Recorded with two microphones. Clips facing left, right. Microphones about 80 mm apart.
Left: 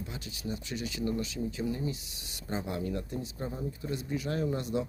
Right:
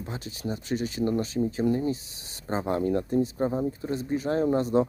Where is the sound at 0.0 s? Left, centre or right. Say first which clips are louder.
Right 5 dB; right.